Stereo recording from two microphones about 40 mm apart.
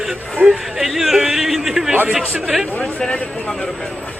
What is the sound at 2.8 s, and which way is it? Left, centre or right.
Speech, left.